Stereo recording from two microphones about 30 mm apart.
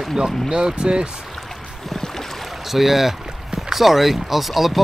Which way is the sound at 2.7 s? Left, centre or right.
Centre.